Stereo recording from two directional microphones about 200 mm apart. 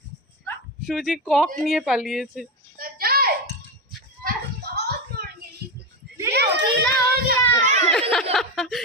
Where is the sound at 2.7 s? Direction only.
45° right (ahead or behind).